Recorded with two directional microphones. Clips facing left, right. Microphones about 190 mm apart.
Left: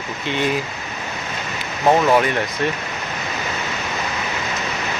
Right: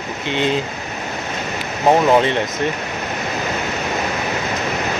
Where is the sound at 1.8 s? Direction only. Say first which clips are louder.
Right 2 dB; 20° right (ahead or behind).